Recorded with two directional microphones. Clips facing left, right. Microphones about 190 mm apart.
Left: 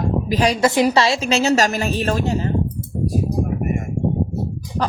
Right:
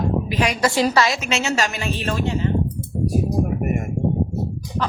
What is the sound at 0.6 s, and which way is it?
A woman's voice, 20° left (ahead or behind).